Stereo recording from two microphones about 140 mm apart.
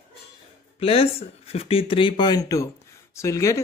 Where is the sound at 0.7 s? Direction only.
45° left (ahead or behind).